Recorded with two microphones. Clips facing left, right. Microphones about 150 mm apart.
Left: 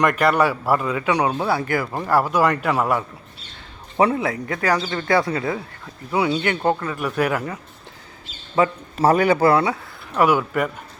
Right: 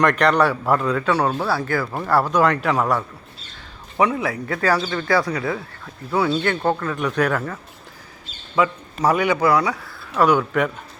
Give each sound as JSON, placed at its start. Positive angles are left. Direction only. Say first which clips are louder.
{"t": 0.0, "sound": "a man's voice", "louder": "right 1 dB", "side_deg": 5}
{"t": 3.9, "sound": "a man's voice", "louder": "left 1 dB", "side_deg": 30}
{"t": 8.5, "sound": "speech", "louder": "left 1 dB", "side_deg": 30}
{"t": 10.2, "sound": "a man's voice", "louder": "right 1 dB", "side_deg": 5}